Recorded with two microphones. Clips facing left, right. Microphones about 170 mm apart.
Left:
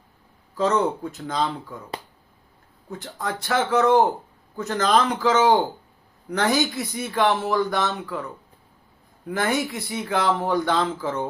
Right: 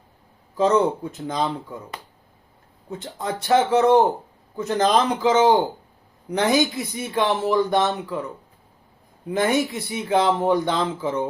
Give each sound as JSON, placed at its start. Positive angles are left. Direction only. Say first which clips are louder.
{"t": 0.5, "sound": "speech", "louder": "right 3 dB", "side_deg": -20}
{"t": 2.9, "sound": "speech", "louder": "right 2 dB", "side_deg": -20}
{"t": 9.2, "sound": "speech", "louder": "right 3 dB", "side_deg": -20}